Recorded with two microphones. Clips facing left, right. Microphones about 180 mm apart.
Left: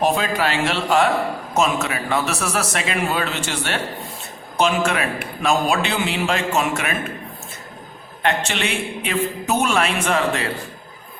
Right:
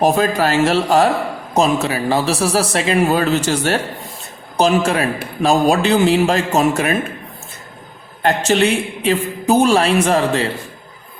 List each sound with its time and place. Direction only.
0.0 s a man's voice: 40° right (ahead or behind)
8.2 s a man's voice: 40° right (ahead or behind)